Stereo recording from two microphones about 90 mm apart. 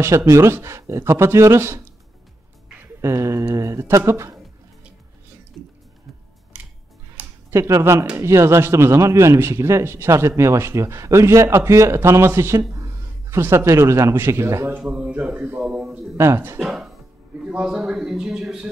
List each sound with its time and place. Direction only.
0.0 s speech: 30° right (ahead or behind)
3.0 s speech: 35° right (ahead or behind)
6.5 s music: 15° right (ahead or behind)
7.2 s a sound: 15° right (ahead or behind)
7.5 s speech: 30° right (ahead or behind)
14.8 s speech: 15° right (ahead or behind)
16.2 s speech: 25° right (ahead or behind)
16.5 s speech: 5° right (ahead or behind)